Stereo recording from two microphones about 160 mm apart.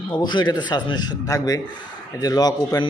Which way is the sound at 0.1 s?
30° left (ahead or behind).